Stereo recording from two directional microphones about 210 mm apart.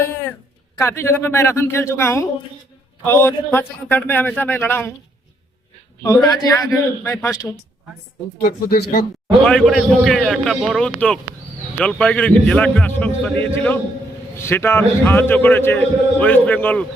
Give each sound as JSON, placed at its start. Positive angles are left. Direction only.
{"t": 0.8, "sound": "a man's voice", "side_deg": 15}
{"t": 6.0, "sound": "a man's voice", "side_deg": 15}
{"t": 8.4, "sound": "speech", "side_deg": 45}
{"t": 9.5, "sound": "a man's voice", "side_deg": 0}